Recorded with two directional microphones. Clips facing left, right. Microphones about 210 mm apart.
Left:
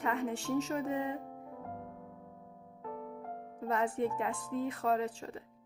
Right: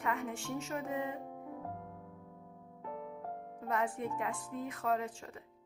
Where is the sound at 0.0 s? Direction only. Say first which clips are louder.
Left 3 dB; 35° left (ahead or behind).